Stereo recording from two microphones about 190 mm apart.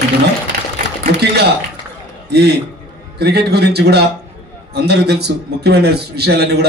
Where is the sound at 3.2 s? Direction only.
60° right (ahead or behind).